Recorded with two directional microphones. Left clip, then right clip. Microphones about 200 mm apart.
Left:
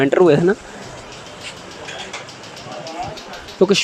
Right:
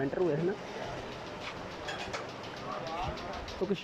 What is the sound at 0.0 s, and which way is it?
Speech, 55° left (ahead or behind).